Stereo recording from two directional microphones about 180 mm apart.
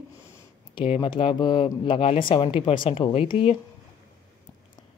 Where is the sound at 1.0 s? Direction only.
30° left (ahead or behind).